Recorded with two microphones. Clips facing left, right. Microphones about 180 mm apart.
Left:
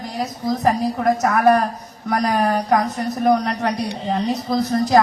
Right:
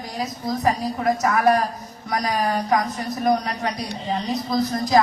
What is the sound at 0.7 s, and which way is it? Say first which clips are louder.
A woman's voice: left 4 dB; 55° left (ahead or behind).